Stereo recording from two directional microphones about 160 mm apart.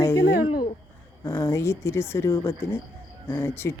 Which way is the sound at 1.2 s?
20° left (ahead or behind).